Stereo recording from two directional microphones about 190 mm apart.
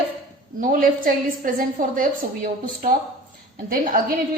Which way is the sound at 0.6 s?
45° right (ahead or behind).